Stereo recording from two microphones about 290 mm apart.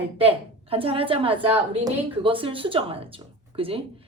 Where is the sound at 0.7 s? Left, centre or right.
Centre.